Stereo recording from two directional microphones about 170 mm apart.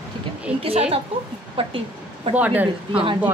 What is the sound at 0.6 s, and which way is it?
A woman's voice, 35° right (ahead or behind).